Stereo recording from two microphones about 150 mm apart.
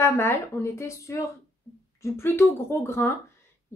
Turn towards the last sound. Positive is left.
turn(degrees=15)  # may be behind; listen again after turning